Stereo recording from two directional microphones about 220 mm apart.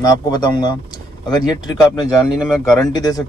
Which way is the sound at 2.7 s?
15° left (ahead or behind).